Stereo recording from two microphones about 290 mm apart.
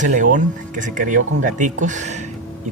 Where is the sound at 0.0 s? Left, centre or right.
Right.